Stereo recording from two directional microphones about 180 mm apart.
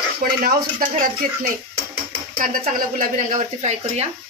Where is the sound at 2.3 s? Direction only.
50° right (ahead or behind).